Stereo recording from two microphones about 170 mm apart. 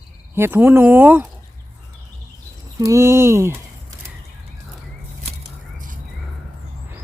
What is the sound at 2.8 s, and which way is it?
Speech, 15° right (ahead or behind).